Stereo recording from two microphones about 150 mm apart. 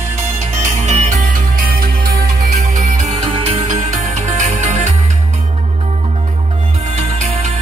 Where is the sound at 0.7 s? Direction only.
50° right (ahead or behind); by 1.9 s 70° right (ahead or behind).